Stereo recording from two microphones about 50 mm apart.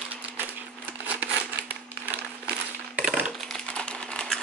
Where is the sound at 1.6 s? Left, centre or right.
Right.